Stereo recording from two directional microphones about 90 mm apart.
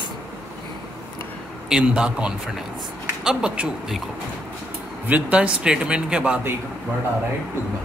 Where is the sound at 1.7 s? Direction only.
10° right (ahead or behind).